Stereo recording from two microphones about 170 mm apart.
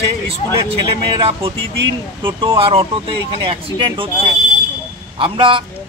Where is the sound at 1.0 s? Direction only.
30° right (ahead or behind).